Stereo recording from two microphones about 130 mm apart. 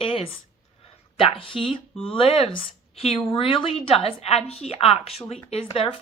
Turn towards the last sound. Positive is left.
turn(degrees=45)  # may be behind; listen again after turning